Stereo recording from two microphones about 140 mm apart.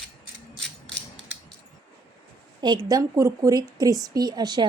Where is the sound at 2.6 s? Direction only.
30° right (ahead or behind).